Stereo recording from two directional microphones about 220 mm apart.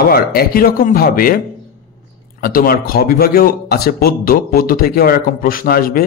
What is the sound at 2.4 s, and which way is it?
A man's voice, 40° left (ahead or behind).